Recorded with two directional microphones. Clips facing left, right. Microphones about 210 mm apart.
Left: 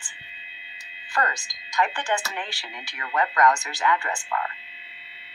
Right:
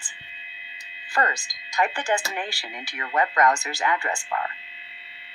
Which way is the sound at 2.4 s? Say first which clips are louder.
Right 3 dB; 5° right (ahead or behind).